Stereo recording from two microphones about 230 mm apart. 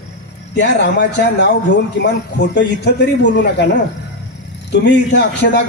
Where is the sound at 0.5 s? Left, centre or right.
Left.